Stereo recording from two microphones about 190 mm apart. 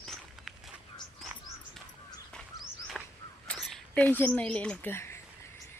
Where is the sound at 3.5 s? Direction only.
Centre (ahead or behind).